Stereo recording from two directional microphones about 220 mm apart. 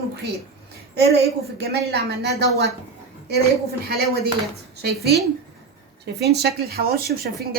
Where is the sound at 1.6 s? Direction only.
45° right (ahead or behind).